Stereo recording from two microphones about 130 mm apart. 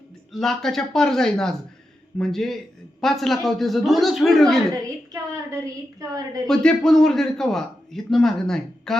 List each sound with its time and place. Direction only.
0.3 s a man's voice: 5° left (ahead or behind)
4.7 s a woman's voice: 25° right (ahead or behind)
6.5 s a man's voice: 5° left (ahead or behind)